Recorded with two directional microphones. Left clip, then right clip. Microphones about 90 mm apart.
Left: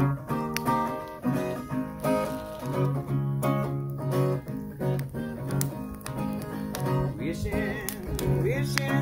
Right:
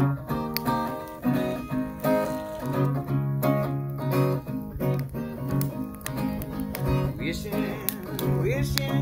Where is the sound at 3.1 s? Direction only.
Centre (ahead or behind).